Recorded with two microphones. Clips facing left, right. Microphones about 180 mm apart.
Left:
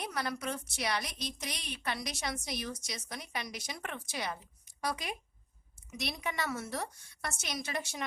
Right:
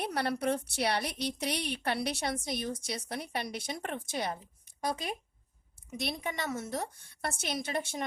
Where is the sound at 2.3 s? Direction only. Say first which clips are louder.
Right 4 dB; 50° right (ahead or behind).